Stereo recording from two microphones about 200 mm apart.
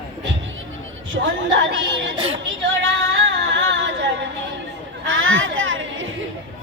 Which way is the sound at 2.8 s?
70° right (ahead or behind).